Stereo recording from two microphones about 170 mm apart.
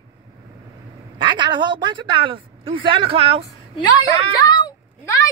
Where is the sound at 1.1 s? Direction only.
30° right (ahead or behind).